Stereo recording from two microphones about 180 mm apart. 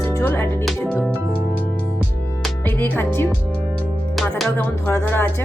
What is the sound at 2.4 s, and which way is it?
Music, 10° left (ahead or behind).